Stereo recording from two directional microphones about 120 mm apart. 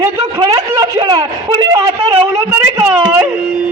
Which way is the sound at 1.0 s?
40° right (ahead or behind).